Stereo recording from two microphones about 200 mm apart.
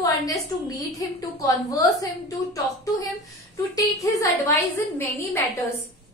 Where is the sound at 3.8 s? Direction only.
15° left (ahead or behind).